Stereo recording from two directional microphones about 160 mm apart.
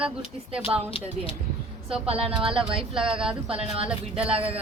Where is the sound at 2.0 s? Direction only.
35° right (ahead or behind).